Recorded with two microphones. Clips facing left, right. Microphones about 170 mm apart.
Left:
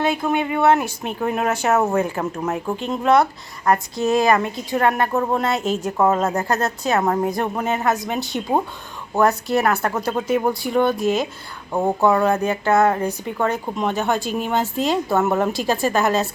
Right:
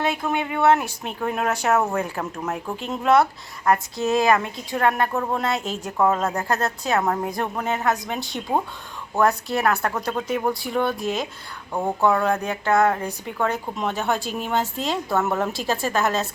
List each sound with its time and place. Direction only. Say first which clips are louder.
0.3 s a woman's voice: left 1 dB; centre (ahead or behind)
11.7 s speech: left 5 dB; 20° left (ahead or behind)
12.0 s a woman's voice: left 3 dB; 5° left (ahead or behind)